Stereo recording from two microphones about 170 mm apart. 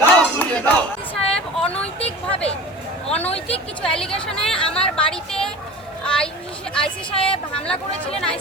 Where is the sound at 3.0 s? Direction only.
10° left (ahead or behind).